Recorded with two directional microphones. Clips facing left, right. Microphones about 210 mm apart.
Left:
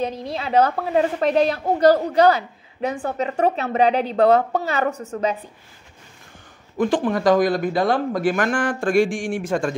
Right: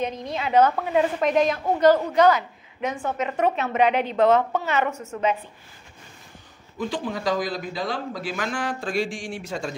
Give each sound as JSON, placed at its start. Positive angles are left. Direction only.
{"t": 0.0, "sound": "a woman's voice", "side_deg": 35}
{"t": 6.9, "sound": "speech", "side_deg": 55}